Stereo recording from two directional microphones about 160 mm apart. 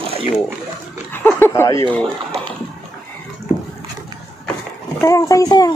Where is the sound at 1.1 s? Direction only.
15° left (ahead or behind).